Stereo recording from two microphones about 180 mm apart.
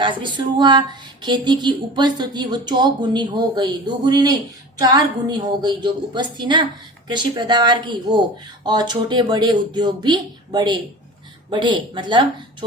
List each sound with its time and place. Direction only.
0.0 s speech: 25° right (ahead or behind)